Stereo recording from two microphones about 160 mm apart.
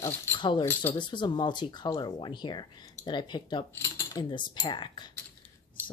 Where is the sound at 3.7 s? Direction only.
15° left (ahead or behind).